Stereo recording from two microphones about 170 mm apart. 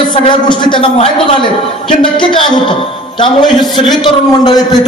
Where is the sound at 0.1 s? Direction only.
30° left (ahead or behind).